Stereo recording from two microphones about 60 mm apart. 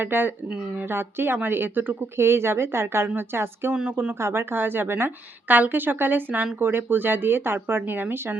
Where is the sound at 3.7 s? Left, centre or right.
Centre.